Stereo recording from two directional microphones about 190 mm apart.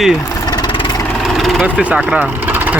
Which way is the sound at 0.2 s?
20° left (ahead or behind).